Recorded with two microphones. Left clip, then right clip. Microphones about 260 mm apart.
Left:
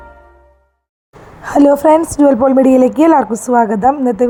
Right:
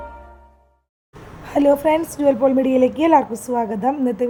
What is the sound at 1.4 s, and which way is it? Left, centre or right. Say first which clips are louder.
A woman's voice: left 7 dB; left.